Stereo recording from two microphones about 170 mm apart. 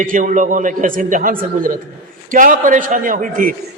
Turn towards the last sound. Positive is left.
turn(degrees=-55)  # may be behind; listen again after turning